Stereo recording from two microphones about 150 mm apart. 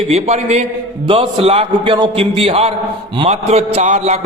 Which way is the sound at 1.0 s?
35° right (ahead or behind).